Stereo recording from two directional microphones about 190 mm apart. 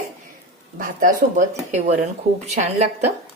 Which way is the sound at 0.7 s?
45° right (ahead or behind).